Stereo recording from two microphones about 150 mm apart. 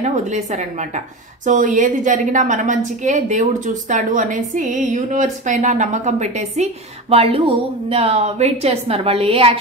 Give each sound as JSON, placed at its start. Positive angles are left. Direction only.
{"t": 0.0, "sound": "a woman's voice", "side_deg": -50}